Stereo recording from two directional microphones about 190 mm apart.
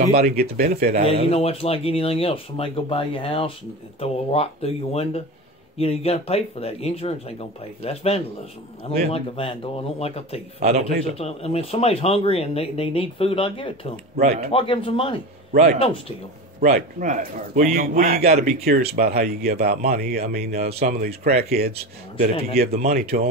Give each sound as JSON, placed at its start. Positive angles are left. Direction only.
{"t": 0.0, "sound": "speech", "side_deg": -55}
{"t": 1.3, "sound": "a man's voice", "side_deg": 30}
{"t": 15.5, "sound": "speech", "side_deg": -40}
{"t": 22.7, "sound": "speech", "side_deg": -35}
{"t": 22.9, "sound": "speech", "side_deg": -55}